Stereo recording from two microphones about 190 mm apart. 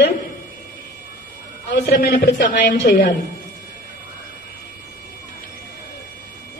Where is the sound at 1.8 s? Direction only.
55° left (ahead or behind).